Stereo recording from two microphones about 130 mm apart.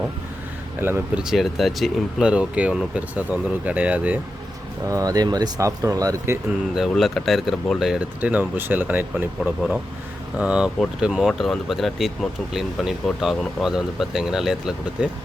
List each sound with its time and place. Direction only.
0.8 s speech: 15° right (ahead or behind)
1.2 s speech: centre (ahead or behind)
4.9 s speech: 25° right (ahead or behind)
6.7 s speech: centre (ahead or behind)
9.4 s speech: centre (ahead or behind)